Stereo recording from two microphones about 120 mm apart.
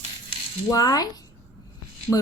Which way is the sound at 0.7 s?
30° left (ahead or behind).